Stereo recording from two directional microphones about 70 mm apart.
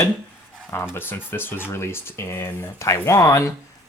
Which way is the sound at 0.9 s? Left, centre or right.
Left.